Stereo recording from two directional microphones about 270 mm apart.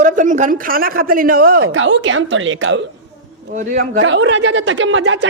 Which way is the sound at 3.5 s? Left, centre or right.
Right.